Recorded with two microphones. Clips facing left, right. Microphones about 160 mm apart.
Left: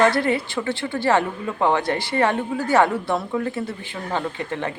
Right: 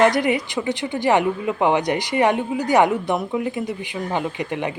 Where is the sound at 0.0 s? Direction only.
15° right (ahead or behind).